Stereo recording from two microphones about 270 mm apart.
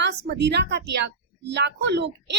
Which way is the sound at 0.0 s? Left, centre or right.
Right.